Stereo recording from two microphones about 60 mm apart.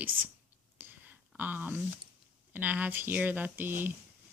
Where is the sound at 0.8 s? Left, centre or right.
Right.